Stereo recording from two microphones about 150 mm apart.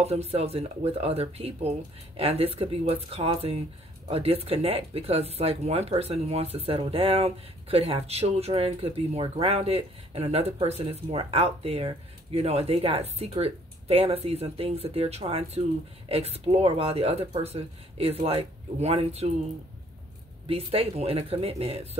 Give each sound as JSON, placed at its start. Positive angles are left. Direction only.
{"t": 0.0, "sound": "speech", "side_deg": -40}
{"t": 20.4, "sound": "speech", "side_deg": -40}